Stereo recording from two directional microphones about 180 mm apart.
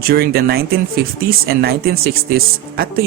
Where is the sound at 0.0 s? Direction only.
60° right (ahead or behind).